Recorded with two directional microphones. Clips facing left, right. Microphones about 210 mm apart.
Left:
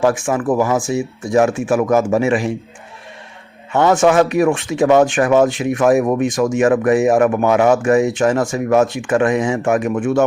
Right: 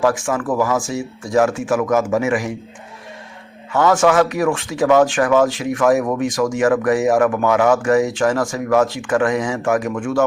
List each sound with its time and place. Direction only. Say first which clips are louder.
0.0 s speech: left 2 dB; 25° left (ahead or behind)
3.7 s speech: left 2 dB; 25° left (ahead or behind)